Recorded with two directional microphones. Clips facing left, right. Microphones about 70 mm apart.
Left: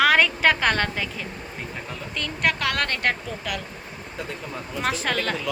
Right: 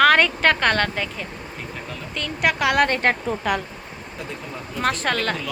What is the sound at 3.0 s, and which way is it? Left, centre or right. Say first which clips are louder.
Speech: right 5 dB; right.